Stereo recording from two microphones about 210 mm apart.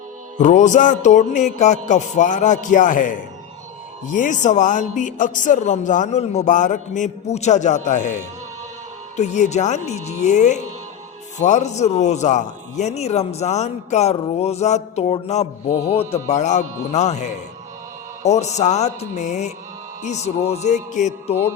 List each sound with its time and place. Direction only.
0.3 s speech: 35° left (ahead or behind)